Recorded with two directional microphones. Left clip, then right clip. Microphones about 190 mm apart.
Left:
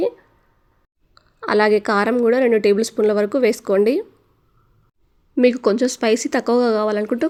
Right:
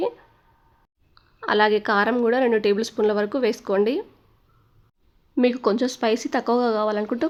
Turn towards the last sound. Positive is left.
turn(degrees=15)  # may be behind; listen again after turning